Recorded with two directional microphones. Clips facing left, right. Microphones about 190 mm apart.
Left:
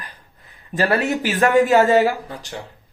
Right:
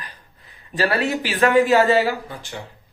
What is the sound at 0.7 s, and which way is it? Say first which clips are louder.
Speech: left 2 dB; 45° left (ahead or behind).